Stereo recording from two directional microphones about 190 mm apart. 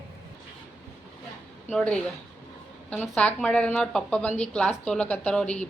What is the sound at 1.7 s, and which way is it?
Speech, 5° left (ahead or behind).